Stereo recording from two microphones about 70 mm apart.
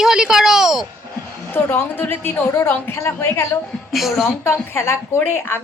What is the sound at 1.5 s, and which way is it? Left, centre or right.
A woman's voice, left.